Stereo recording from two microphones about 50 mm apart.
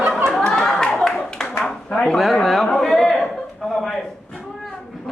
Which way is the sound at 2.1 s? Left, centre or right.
Centre.